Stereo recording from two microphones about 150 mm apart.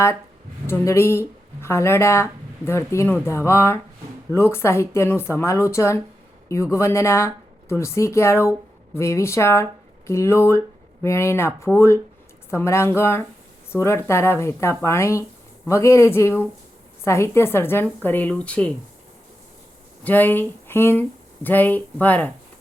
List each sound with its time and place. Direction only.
0.7 s speech: 15° left (ahead or behind)
20.1 s speech: 15° left (ahead or behind)